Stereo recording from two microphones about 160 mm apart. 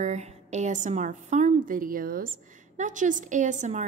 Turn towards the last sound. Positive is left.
turn(degrees=-50)  # may be behind; listen again after turning